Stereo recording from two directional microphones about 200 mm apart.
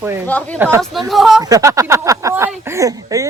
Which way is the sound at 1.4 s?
15° right (ahead or behind).